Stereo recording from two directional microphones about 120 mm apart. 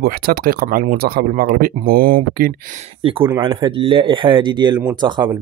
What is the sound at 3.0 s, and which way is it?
Speech, 50° right (ahead or behind).